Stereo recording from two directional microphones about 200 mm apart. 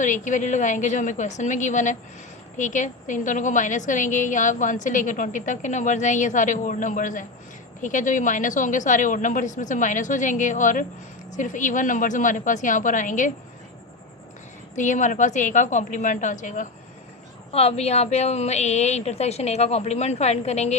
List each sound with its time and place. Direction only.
0.0 s a woman's voice: 40° left (ahead or behind)
14.8 s a woman's voice: 40° left (ahead or behind)